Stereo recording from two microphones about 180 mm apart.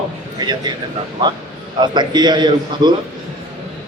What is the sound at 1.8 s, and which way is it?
A man's voice, 25° right (ahead or behind).